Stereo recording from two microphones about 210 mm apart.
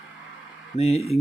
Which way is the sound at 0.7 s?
30° left (ahead or behind).